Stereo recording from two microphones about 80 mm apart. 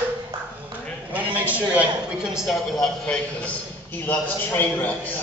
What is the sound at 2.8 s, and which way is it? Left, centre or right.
A man's voice, centre.